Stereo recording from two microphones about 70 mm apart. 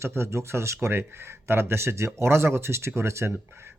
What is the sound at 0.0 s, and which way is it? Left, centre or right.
Speech, right.